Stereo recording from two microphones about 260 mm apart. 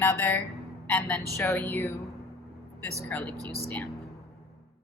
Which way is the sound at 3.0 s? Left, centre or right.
Centre.